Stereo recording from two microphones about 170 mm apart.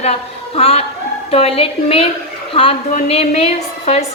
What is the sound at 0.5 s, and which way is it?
A woman's voice, 35° left (ahead or behind).